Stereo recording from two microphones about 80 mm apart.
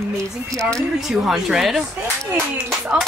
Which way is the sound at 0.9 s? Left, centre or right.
Centre.